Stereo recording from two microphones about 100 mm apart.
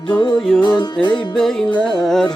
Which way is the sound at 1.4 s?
5° left (ahead or behind).